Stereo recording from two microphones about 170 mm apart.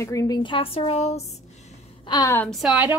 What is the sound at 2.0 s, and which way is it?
Speech, 20° left (ahead or behind).